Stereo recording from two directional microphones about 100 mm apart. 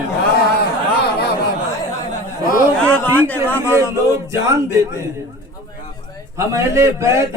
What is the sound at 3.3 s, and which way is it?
Speech, 20° left (ahead or behind).